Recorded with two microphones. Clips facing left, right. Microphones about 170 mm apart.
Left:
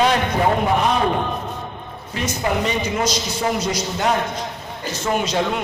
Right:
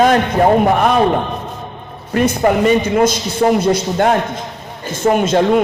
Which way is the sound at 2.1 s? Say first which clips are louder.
Right 9 dB; 55° right (ahead or behind).